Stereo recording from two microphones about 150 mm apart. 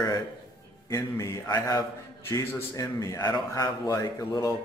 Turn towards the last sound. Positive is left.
turn(degrees=25)  # may be behind; listen again after turning